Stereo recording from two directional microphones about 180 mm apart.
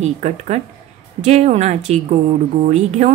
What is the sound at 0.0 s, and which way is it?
Speech, 40° right (ahead or behind).